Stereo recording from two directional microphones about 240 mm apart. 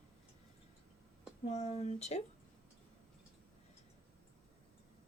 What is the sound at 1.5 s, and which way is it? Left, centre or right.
Speech, left.